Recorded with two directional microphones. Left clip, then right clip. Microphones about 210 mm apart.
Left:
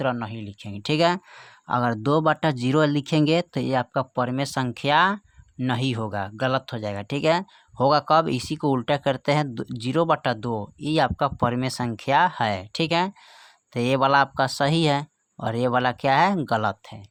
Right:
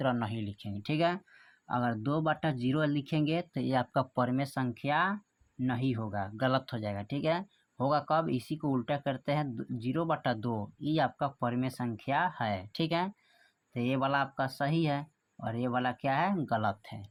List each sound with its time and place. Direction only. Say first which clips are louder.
0.0 s speech: left 6 dB; 20° left (ahead or behind)
0.7 s speech: left 10 dB; 35° left (ahead or behind)